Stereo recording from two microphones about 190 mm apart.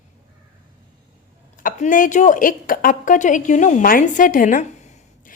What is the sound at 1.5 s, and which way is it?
A woman's voice, 45° left (ahead or behind).